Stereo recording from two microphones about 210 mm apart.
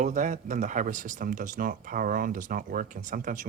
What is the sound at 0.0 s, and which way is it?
Speech, 35° right (ahead or behind).